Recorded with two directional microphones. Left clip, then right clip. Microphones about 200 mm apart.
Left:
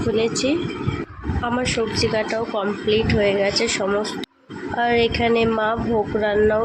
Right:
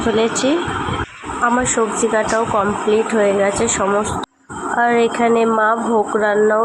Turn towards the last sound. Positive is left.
turn(degrees=-10)  # may be behind; listen again after turning